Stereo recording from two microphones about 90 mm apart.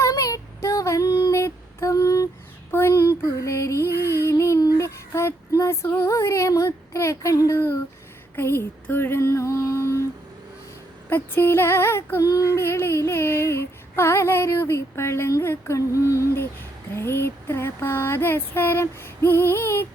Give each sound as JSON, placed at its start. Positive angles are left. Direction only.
{"t": 0.0, "sound": "female singing", "side_deg": 40}
{"t": 2.7, "sound": "a sound", "side_deg": 30}
{"t": 6.1, "sound": "child singing", "side_deg": 35}
{"t": 8.4, "sound": "female singing", "side_deg": 25}
{"t": 11.1, "sound": "female singing", "side_deg": 25}